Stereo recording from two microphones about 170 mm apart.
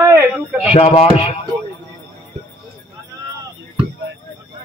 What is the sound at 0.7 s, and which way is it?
Speech, 35° left (ahead or behind).